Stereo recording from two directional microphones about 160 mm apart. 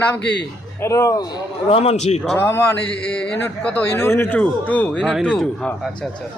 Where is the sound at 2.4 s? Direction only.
15° left (ahead or behind); by 5.7 s centre (ahead or behind).